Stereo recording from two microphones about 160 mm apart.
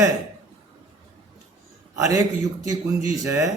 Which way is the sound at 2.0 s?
20° right (ahead or behind).